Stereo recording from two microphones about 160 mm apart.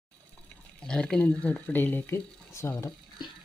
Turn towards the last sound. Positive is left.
turn(degrees=15)  # may be behind; listen again after turning